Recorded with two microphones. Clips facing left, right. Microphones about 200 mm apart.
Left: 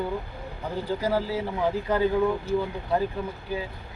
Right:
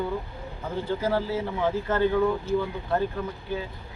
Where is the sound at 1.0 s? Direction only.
15° left (ahead or behind).